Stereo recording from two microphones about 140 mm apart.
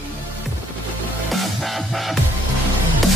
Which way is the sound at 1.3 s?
Centre (ahead or behind).